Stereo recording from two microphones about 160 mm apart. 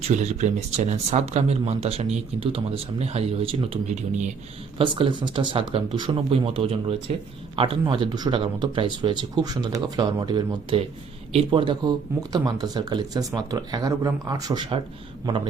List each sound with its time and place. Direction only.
0.0 s speech: 45° right (ahead or behind); by 14.8 s 25° right (ahead or behind)